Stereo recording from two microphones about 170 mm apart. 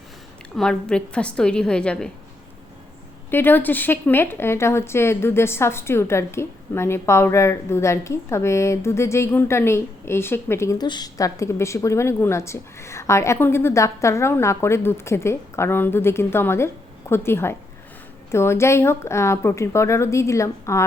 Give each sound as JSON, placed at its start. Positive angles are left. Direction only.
{"t": 0.5, "sound": "a woman's voice", "side_deg": 5}
{"t": 3.2, "sound": "a woman's voice", "side_deg": 10}